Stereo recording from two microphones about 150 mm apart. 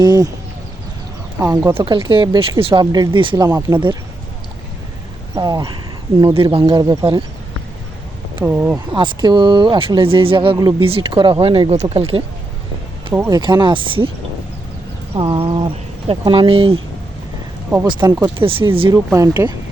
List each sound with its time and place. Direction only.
0.0 s speech: 30° right (ahead or behind)
1.4 s speech: 20° right (ahead or behind)
5.3 s speech: 25° right (ahead or behind)
8.4 s speech: 15° right (ahead or behind)
9.0 s speech: 30° right (ahead or behind)
13.1 s speech: 15° right (ahead or behind)
13.4 s speech: 30° right (ahead or behind)
15.1 s speech: 35° right (ahead or behind)
18.2 s speech: 35° right (ahead or behind)
18.9 s speech: 20° right (ahead or behind)